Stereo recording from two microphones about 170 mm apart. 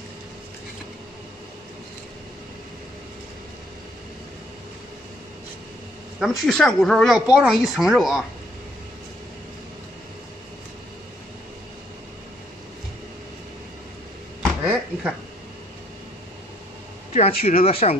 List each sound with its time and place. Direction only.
6.1 s speech: centre (ahead or behind)
14.6 s a sound: 5° right (ahead or behind)
17.1 s speech: 40° left (ahead or behind)